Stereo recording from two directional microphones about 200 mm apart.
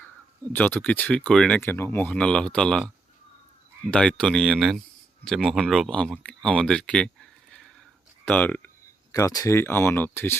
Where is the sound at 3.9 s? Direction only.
5° left (ahead or behind).